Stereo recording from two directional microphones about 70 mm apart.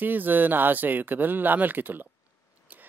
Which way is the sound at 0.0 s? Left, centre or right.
Right.